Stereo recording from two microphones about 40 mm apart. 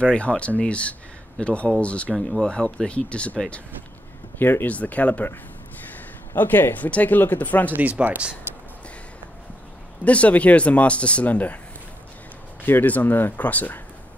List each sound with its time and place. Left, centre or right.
0.0 s speech: left
4.4 s speech: left
4.6 s speech: left
6.3 s speech: left
8.0 s speech: right
10.0 s speech: left
12.8 s speech: left
13.4 s speech: left